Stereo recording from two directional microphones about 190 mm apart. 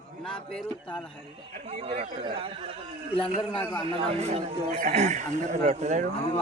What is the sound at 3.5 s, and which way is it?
Speech, 5° left (ahead or behind).